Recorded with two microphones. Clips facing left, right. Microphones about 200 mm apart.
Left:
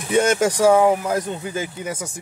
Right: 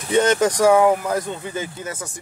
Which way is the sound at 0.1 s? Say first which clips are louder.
Right 1 dB; 10° left (ahead or behind).